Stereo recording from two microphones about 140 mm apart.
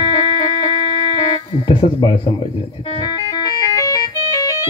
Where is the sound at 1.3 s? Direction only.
40° left (ahead or behind).